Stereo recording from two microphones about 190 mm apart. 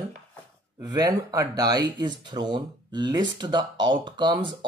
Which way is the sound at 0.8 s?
20° right (ahead or behind).